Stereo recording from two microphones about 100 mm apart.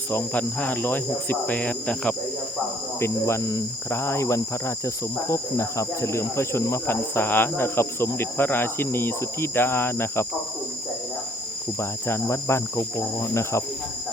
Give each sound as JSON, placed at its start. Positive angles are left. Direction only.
{"t": 0.1, "sound": "cricket", "side_deg": 20}
{"t": 3.0, "sound": "cricket", "side_deg": 25}
{"t": 11.8, "sound": "cricket", "side_deg": 25}